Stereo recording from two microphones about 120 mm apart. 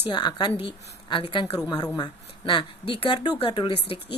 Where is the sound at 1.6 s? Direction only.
35° left (ahead or behind).